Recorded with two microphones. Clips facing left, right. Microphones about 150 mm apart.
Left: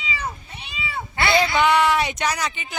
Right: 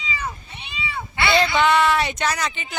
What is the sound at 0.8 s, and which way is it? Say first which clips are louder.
Cat: even; 45° left (ahead or behind).